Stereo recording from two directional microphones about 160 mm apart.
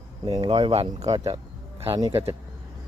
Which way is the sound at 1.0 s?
20° right (ahead or behind).